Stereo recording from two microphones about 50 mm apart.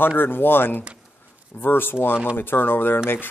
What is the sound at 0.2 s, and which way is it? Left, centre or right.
Speech, left.